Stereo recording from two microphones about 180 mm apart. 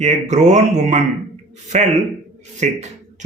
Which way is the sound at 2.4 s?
40° right (ahead or behind).